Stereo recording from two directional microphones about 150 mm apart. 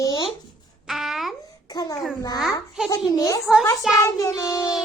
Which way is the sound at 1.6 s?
25° left (ahead or behind).